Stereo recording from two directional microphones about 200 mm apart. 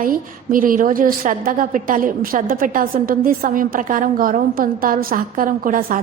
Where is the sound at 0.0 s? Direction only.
45° right (ahead or behind).